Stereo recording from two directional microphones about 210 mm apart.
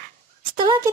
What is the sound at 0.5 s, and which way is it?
Speech, 25° right (ahead or behind).